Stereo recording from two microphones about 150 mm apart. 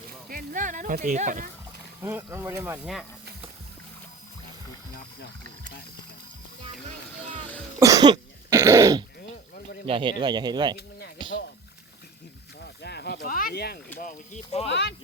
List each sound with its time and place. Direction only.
0.3 s speech: 65° right (ahead or behind)
2.0 s speech: 15° right (ahead or behind)
2.8 s speech: centre (ahead or behind)
7.8 s cough: 20° right (ahead or behind)
9.8 s speech: 35° right (ahead or behind)
11.2 s a sound: 30° right (ahead or behind)
12.6 s snake: 90° left
14.0 s speech: 55° left (ahead or behind)